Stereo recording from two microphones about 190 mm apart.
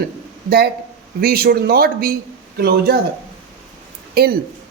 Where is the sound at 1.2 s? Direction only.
50° right (ahead or behind).